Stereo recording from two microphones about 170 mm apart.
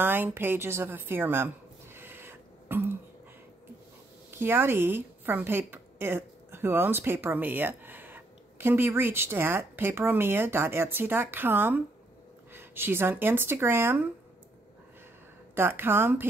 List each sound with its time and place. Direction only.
0.0 s a woman's voice: 10° right (ahead or behind)
2.0 s a sound: 15° right (ahead or behind)
4.4 s a woman's voice: 15° right (ahead or behind)
15.5 s a woman's voice: 15° right (ahead or behind)